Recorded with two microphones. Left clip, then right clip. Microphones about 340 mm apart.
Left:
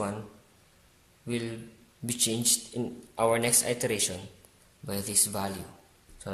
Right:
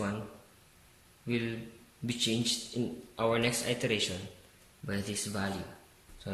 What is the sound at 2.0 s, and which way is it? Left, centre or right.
A man's voice, centre.